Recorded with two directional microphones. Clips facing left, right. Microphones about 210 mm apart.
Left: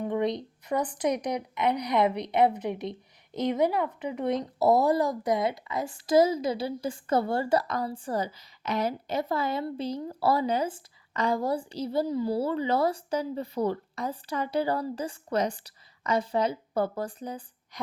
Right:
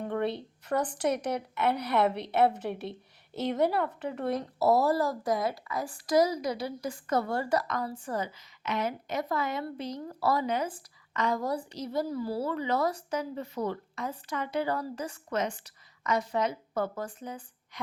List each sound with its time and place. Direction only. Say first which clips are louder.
0.0 s a woman's voice: left 3 dB; 15° left (ahead or behind); by 17.7 s 35° left (ahead or behind)